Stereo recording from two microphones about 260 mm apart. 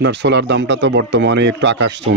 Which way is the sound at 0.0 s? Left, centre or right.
Right.